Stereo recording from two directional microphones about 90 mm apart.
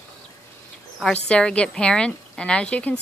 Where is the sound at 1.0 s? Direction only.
10° left (ahead or behind).